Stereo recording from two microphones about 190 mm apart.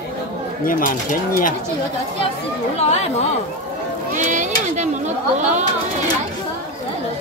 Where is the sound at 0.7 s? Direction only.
45° left (ahead or behind).